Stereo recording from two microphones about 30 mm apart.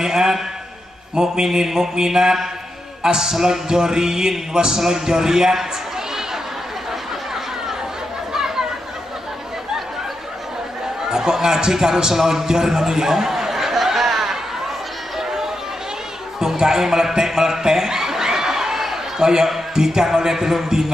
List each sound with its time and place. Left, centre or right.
0.0 s a man's voice: right
8.3 s chatter: centre
11.1 s a man's voice: centre
15.1 s a sound: centre
16.3 s chuckle: centre
19.7 s a man's voice: right